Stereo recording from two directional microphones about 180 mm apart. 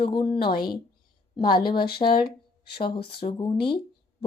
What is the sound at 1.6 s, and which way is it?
Speech, 25° left (ahead or behind).